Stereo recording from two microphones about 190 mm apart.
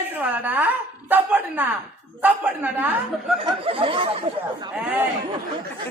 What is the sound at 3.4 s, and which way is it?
Speech, 30° right (ahead or behind).